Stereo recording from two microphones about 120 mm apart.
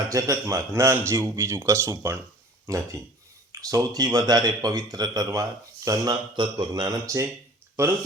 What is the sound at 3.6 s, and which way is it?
A man's voice, 30° right (ahead or behind).